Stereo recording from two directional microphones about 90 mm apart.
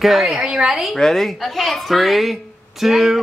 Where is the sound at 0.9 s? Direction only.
5° left (ahead or behind).